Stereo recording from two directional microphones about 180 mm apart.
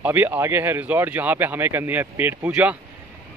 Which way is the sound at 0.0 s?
10° right (ahead or behind).